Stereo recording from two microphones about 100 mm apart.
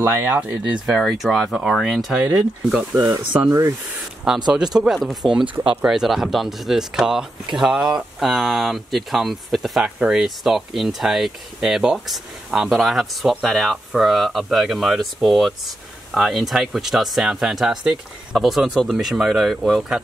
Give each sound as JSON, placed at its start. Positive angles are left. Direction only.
{"t": 0.0, "sound": "speech", "side_deg": -20}
{"t": 0.7, "sound": "speech", "side_deg": -5}
{"t": 2.3, "sound": "speech", "side_deg": -10}
{"t": 3.0, "sound": "speech", "side_deg": -45}
{"t": 3.3, "sound": "speech", "side_deg": -30}
{"t": 4.3, "sound": "speech", "side_deg": -5}